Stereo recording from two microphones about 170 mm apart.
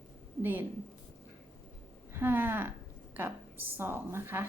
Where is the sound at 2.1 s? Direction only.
10° right (ahead or behind).